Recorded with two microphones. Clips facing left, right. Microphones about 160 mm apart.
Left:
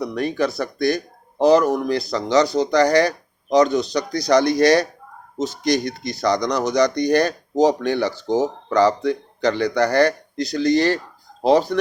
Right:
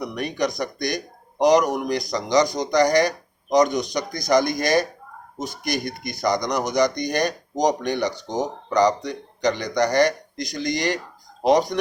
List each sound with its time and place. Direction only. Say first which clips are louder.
0.1 s speech: left 3 dB; 15° right (ahead or behind)
4.4 s speech: left 5 dB; 70° left (ahead or behind)
5.4 s speech: left 7 dB; 10° right (ahead or behind)
8.1 s speech: left 6 dB; 5° left (ahead or behind)
8.7 s speech: left 2 dB; 15° right (ahead or behind)